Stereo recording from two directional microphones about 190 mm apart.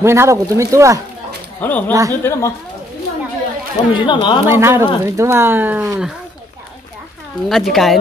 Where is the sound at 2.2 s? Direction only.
15° left (ahead or behind).